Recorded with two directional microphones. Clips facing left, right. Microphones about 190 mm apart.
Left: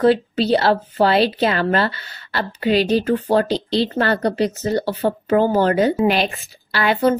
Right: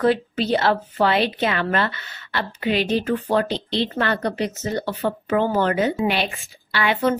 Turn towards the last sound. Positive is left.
turn(degrees=35)  # may be behind; listen again after turning